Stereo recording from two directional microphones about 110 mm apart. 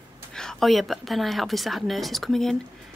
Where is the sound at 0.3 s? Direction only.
5° left (ahead or behind).